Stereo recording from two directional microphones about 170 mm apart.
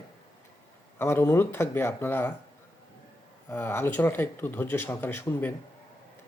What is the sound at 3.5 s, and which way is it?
Speech, 15° left (ahead or behind).